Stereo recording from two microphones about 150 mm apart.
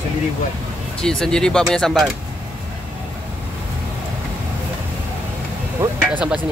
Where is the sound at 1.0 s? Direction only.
5° left (ahead or behind).